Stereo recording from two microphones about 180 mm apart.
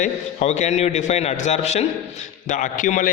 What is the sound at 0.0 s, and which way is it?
A man's voice, 40° left (ahead or behind).